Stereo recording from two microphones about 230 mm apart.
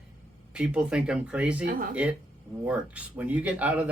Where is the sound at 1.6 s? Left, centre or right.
Right.